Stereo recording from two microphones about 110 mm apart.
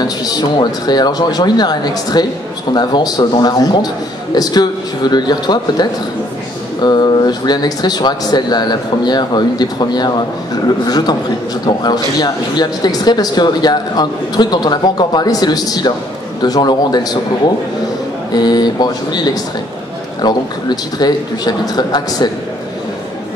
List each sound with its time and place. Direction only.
0.0 s speech: 35° left (ahead or behind)
18.3 s speech: 40° left (ahead or behind)